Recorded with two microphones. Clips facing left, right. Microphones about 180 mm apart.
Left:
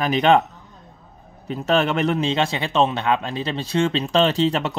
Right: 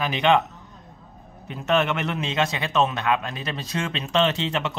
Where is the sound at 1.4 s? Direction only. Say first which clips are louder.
Left 3 dB; 35° left (ahead or behind).